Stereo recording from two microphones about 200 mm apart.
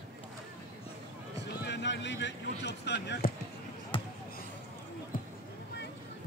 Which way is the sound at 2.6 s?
60° left (ahead or behind).